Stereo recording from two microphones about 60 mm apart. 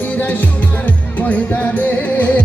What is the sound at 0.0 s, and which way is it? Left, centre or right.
Music, left.